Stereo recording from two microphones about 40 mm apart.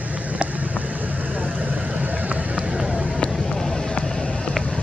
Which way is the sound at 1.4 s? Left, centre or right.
Right.